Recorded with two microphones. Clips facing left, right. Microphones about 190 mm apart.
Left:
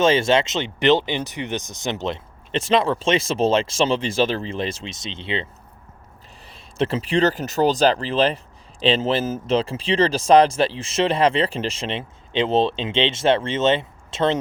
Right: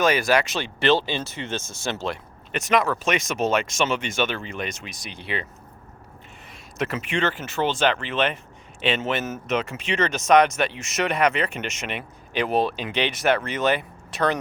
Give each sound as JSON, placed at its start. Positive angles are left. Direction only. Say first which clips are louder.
{"t": 0.0, "sound": "speech", "louder": "left 3 dB", "side_deg": 25}
{"t": 6.5, "sound": "speech", "louder": "left 5 dB", "side_deg": 30}